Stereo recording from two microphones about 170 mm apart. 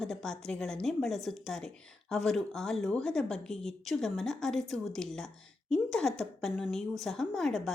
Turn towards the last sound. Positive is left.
turn(degrees=0)  # may be behind; listen again after turning